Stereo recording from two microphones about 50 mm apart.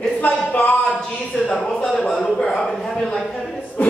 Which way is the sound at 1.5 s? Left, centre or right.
Centre.